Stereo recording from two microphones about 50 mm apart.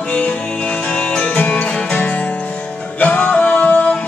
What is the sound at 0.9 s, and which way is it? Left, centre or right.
Music, left.